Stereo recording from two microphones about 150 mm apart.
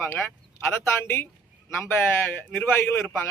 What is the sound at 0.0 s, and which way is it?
A man's voice, 15° left (ahead or behind).